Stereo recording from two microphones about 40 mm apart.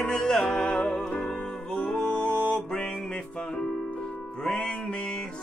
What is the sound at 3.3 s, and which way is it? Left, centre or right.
Music, left.